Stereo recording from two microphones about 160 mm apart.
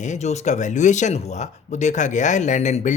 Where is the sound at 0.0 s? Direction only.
45° left (ahead or behind).